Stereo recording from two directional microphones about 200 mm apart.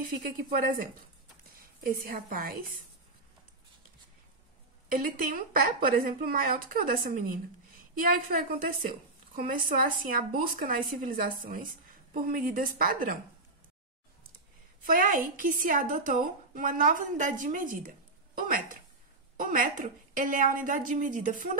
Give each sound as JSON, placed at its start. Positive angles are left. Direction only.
{"t": 0.5, "sound": "a woman's voice", "side_deg": -45}
{"t": 4.8, "sound": "a woman's voice", "side_deg": -45}
{"t": 14.8, "sound": "a woman's voice", "side_deg": -45}